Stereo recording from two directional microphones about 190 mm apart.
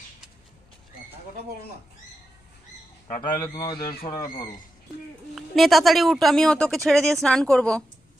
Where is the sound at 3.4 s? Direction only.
15° left (ahead or behind).